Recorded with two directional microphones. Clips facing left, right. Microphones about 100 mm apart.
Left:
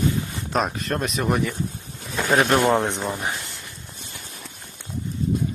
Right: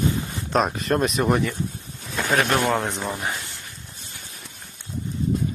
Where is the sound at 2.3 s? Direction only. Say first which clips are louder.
Left 3 dB; 15° left (ahead or behind).